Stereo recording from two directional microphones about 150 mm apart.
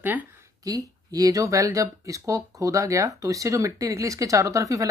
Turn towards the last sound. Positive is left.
turn(degrees=-20)  # may be behind; listen again after turning